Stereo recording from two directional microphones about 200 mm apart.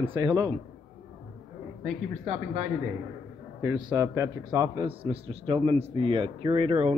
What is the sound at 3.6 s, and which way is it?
A man's voice, 20° right (ahead or behind).